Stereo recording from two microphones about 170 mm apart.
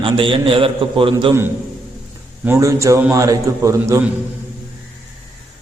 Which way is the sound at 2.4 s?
15° right (ahead or behind).